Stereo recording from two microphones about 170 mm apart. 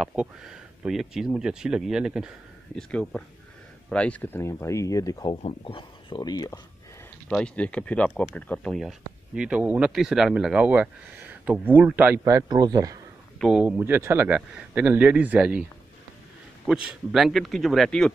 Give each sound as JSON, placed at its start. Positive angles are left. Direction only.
{"t": 0.0, "sound": "speech", "side_deg": -5}
{"t": 7.2, "sound": "speech", "side_deg": 5}
{"t": 13.4, "sound": "speech", "side_deg": -5}
{"t": 16.6, "sound": "speech", "side_deg": -5}